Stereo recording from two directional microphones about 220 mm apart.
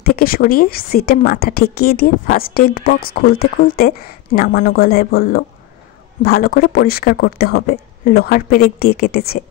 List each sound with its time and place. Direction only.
0.0 s a woman's voice: 45° left (ahead or behind)